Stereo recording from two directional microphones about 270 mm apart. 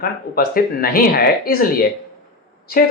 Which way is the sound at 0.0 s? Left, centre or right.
Left.